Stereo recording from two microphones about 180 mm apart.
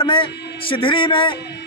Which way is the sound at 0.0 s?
30° left (ahead or behind).